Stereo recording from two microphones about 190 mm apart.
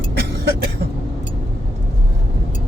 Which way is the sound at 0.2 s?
60° right (ahead or behind).